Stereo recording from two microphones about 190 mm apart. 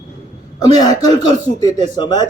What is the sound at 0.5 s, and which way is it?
A man's voice, 20° left (ahead or behind).